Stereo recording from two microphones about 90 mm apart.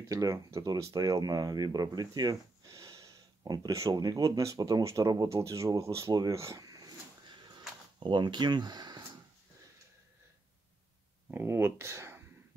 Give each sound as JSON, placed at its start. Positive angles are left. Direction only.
{"t": 0.1, "sound": "speech", "side_deg": -35}
{"t": 5.3, "sound": "speech", "side_deg": -35}
{"t": 8.0, "sound": "speech", "side_deg": -60}
{"t": 11.2, "sound": "speech", "side_deg": -25}